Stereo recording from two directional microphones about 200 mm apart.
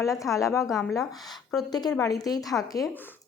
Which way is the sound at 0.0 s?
15° left (ahead or behind).